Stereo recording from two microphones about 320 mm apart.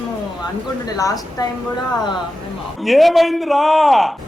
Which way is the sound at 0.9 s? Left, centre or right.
Centre.